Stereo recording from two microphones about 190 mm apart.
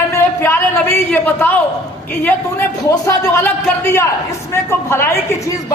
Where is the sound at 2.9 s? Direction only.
15° left (ahead or behind).